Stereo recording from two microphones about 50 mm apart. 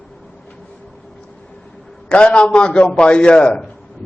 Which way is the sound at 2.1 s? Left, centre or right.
Left.